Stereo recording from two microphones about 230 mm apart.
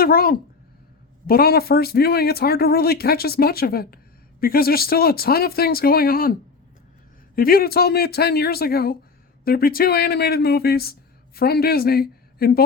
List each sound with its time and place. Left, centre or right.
0.0 s a man's voice: left
7.3 s a woman's voice: left